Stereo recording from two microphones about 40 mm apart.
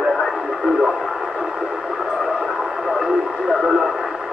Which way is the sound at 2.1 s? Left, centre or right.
Centre.